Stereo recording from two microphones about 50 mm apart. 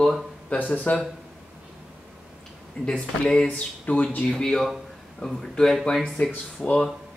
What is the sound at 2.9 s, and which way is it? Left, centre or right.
Speech, centre.